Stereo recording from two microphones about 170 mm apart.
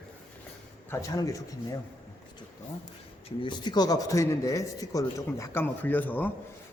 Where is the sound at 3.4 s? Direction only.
25° left (ahead or behind).